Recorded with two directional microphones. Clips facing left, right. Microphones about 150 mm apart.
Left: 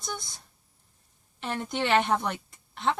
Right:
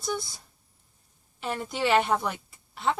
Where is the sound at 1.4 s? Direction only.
5° right (ahead or behind).